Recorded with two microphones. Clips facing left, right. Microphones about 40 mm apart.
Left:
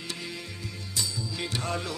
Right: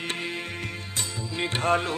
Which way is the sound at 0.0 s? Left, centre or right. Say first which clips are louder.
Right 6 dB; right.